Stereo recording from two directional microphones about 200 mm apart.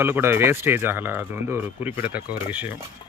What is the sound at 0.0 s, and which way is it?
Speech, 10° right (ahead or behind).